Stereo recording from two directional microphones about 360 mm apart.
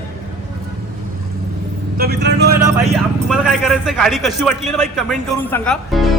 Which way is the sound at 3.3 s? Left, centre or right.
Centre.